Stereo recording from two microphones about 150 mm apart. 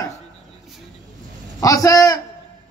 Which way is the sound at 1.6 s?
20° left (ahead or behind).